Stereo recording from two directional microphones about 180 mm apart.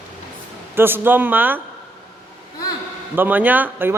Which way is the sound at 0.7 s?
10° right (ahead or behind).